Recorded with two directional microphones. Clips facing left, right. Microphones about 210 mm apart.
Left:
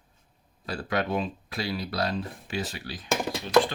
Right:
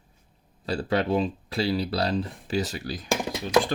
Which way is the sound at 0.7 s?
30° right (ahead or behind).